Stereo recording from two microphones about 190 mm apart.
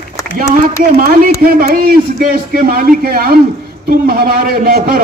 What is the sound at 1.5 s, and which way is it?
A man's voice, 50° right (ahead or behind).